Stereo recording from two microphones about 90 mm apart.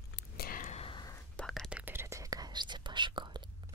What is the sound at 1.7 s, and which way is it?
Whispering, 20° right (ahead or behind).